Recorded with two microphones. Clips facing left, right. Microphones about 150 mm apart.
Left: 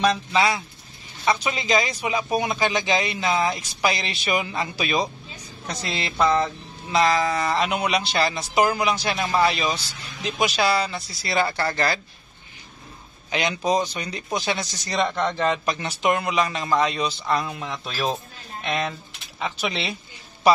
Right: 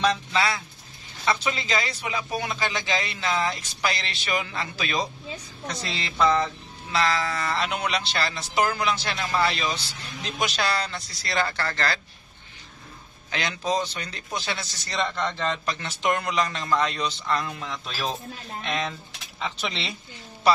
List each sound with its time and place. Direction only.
0.0 s speech: 15° left (ahead or behind)
13.3 s speech: 20° left (ahead or behind)